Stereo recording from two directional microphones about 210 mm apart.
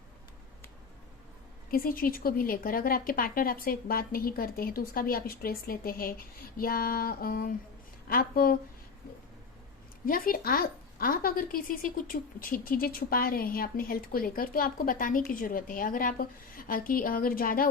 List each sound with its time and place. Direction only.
1.7 s a woman's voice: 45° left (ahead or behind)
10.1 s a woman's voice: 45° left (ahead or behind)